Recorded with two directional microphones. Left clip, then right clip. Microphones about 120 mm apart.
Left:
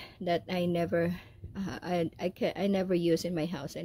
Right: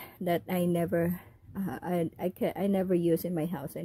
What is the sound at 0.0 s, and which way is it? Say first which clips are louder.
Speech: even; 60° right (ahead or behind).